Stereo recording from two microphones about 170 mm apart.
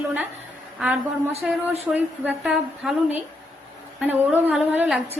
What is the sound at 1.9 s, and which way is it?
A woman's voice, 5° right (ahead or behind).